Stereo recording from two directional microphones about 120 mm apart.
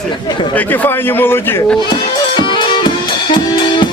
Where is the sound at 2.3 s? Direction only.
40° left (ahead or behind).